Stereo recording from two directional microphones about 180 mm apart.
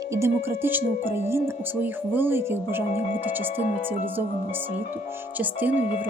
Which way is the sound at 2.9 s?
35° left (ahead or behind).